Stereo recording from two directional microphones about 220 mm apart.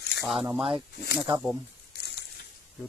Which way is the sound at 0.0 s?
50° left (ahead or behind).